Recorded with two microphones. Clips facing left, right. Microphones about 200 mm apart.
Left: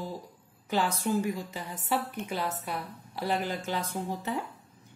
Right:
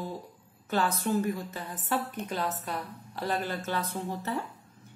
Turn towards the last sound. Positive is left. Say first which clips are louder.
# even
turn(degrees=15)  # may be behind; listen again after turning